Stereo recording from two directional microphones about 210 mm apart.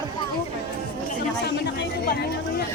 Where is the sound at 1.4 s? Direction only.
50° left (ahead or behind).